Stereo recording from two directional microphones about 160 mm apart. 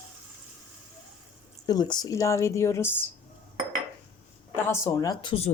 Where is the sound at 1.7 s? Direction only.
25° left (ahead or behind).